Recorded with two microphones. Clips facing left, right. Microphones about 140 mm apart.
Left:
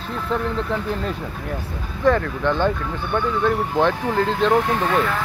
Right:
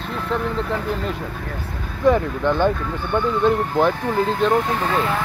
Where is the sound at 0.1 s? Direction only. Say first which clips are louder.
Even; centre (ahead or behind).